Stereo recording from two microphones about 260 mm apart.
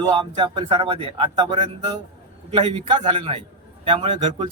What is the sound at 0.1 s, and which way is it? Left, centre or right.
Speech, centre.